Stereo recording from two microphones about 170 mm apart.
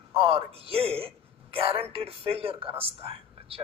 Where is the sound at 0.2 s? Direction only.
35° right (ahead or behind).